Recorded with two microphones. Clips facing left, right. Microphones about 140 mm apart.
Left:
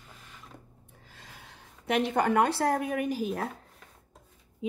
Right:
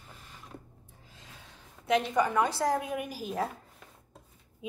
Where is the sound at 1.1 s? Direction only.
70° left (ahead or behind).